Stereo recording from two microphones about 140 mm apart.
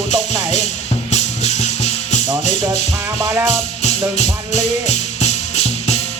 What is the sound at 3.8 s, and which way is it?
Music, 55° left (ahead or behind).